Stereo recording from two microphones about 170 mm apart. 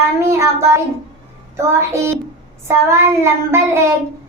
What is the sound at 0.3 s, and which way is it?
Child singing, 15° right (ahead or behind).